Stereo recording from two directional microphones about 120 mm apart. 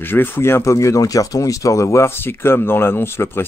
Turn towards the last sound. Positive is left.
turn(degrees=20)  # may be behind; listen again after turning